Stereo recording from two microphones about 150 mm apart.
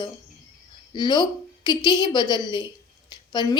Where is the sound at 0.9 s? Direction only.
30° left (ahead or behind).